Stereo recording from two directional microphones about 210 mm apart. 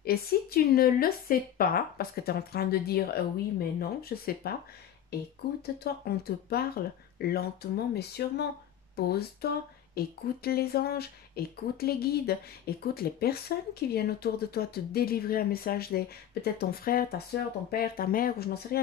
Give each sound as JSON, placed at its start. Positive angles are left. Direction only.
{"t": 0.0, "sound": "speech", "side_deg": 45}